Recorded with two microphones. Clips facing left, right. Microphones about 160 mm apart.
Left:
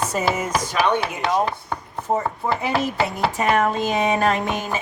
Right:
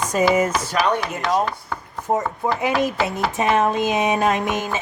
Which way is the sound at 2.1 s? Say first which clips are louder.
Right 1 dB; 10° right (ahead or behind).